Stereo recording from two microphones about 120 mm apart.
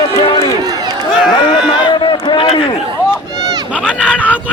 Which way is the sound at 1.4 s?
40° left (ahead or behind).